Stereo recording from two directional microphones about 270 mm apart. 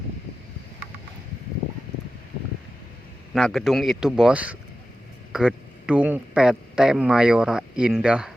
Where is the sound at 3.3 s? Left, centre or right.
Centre.